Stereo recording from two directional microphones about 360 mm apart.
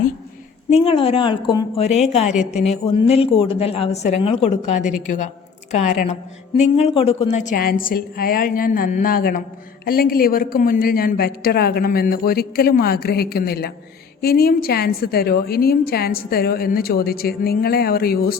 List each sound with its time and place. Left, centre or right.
0.7 s a woman's voice: centre